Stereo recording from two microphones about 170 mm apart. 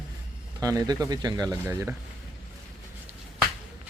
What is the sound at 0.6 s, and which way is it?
Speech, 20° right (ahead or behind).